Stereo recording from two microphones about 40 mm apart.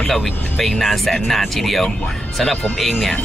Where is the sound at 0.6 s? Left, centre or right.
Centre.